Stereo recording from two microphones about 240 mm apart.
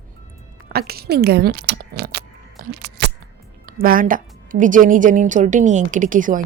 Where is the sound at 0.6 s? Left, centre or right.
Right.